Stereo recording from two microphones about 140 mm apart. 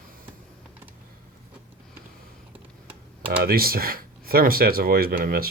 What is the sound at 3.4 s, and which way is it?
Speech, 90° right.